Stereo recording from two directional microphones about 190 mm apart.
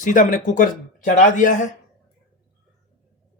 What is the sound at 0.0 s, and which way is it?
Speech, 45° left (ahead or behind).